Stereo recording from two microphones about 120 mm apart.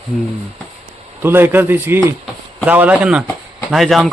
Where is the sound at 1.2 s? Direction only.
20° right (ahead or behind).